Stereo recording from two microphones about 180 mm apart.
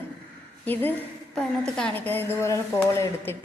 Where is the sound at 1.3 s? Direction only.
5° left (ahead or behind).